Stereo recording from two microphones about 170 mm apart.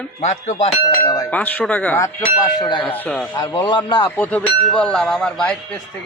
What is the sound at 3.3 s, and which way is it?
Speech, 25° left (ahead or behind).